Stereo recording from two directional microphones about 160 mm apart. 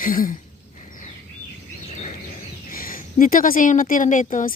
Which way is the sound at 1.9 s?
50° left (ahead or behind).